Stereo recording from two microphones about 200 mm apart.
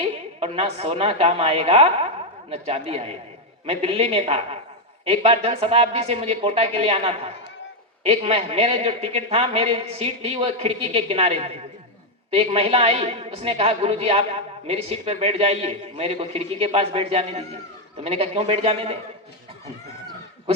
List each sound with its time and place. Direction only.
0.0 s a man's voice: 30° right (ahead or behind)